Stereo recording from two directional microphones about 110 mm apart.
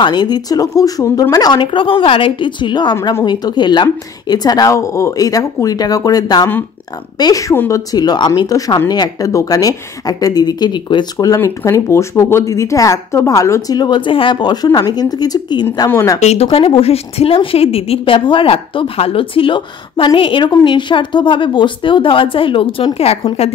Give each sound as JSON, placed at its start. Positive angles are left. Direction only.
{"t": 0.0, "sound": "a woman's voice", "side_deg": 40}
{"t": 7.5, "sound": "speech", "side_deg": 25}
{"t": 7.9, "sound": "speech", "side_deg": 40}
{"t": 15.9, "sound": "speech", "side_deg": 25}
{"t": 16.2, "sound": "speech", "side_deg": 85}
{"t": 16.5, "sound": "a woman's voice", "side_deg": 60}
{"t": 22.9, "sound": "a woman's voice", "side_deg": 65}